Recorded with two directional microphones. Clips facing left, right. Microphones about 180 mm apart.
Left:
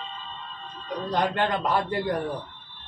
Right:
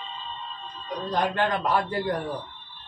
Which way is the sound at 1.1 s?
20° left (ahead or behind).